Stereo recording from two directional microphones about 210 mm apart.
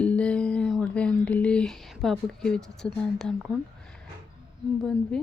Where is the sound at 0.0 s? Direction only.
5° left (ahead or behind).